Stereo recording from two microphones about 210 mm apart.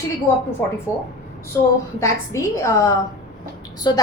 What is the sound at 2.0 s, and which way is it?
A woman's voice, 15° left (ahead or behind).